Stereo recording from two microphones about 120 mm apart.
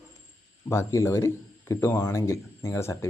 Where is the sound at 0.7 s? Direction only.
20° left (ahead or behind).